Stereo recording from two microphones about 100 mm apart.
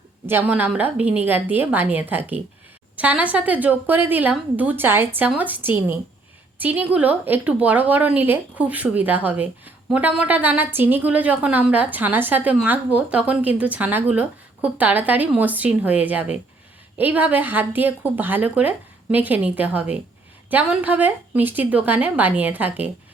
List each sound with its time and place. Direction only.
0.3 s a woman's voice: 20° right (ahead or behind)